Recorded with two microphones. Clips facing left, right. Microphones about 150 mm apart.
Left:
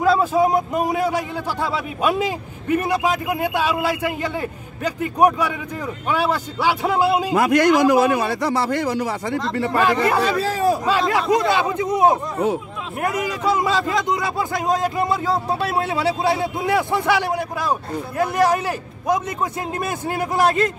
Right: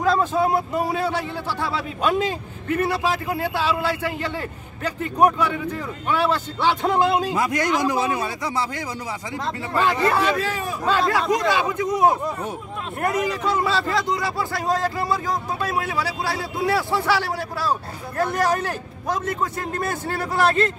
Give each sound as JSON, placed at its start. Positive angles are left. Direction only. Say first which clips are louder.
{"t": 0.0, "sound": "a man's voice", "louder": "left 3 dB", "side_deg": 5}
{"t": 7.3, "sound": "a man's voice", "louder": "left 7 dB", "side_deg": 70}
{"t": 10.2, "sound": "speech", "louder": "left 4 dB", "side_deg": 35}
{"t": 10.9, "sound": "speech", "louder": "left 2 dB", "side_deg": 20}
{"t": 13.0, "sound": "a man's voice", "louder": "left 1 dB", "side_deg": 10}